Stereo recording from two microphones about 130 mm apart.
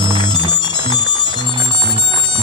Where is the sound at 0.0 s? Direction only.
35° left (ahead or behind).